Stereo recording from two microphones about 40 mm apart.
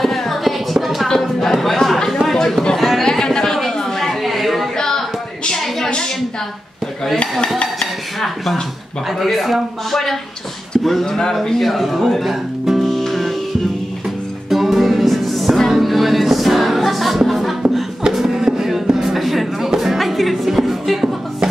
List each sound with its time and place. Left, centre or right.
0.0 s music: centre
1.0 s chatter: centre
2.3 s a sound: centre
3.1 s chatter: centre
4.7 s a sound: centre
9.2 s a man's voice: centre
11.1 s a man's voice: centre
11.3 s speech: centre
12.9 s music: centre
14.5 s music: centre
18.1 s a sound: centre
19.7 s music: centre